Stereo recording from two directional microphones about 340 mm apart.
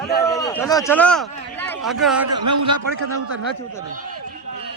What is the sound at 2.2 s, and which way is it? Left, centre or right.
Speech, right.